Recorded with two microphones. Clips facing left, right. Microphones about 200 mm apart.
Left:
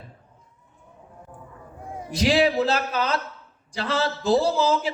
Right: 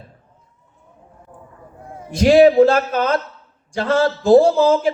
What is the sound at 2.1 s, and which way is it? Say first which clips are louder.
A man's voice: right 10 dB; 50° right (ahead or behind).